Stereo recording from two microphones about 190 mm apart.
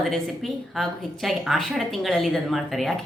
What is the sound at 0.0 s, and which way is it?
A woman's voice, centre (ahead or behind).